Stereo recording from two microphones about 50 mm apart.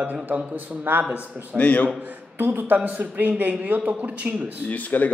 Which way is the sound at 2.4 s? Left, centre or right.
Right.